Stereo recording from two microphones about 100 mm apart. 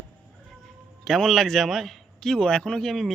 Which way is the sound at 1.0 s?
5° left (ahead or behind).